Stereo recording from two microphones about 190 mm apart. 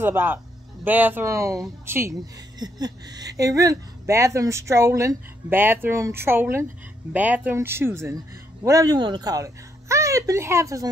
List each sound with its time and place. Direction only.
0.0 s speech: 10° right (ahead or behind)